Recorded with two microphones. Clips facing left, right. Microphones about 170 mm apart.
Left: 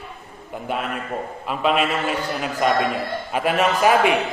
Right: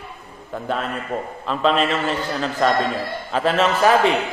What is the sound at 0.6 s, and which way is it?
A man's voice, 10° left (ahead or behind).